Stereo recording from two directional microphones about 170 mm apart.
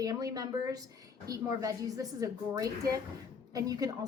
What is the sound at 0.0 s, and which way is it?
A woman's voice, 20° right (ahead or behind).